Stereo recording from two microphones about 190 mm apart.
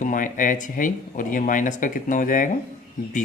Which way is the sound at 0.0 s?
45° left (ahead or behind).